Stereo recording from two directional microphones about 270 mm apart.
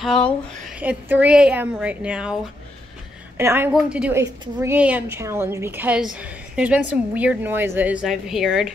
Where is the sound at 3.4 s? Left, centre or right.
Centre.